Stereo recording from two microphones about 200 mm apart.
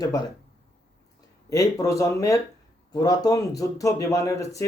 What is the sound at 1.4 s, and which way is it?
Speech, 15° left (ahead or behind).